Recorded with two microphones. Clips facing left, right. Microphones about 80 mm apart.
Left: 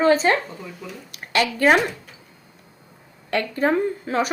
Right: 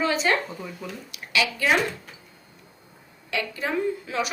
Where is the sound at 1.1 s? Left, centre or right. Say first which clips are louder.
Left 4 dB; left.